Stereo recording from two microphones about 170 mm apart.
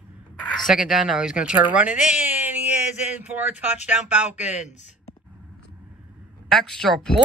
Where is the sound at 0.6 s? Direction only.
5° right (ahead or behind).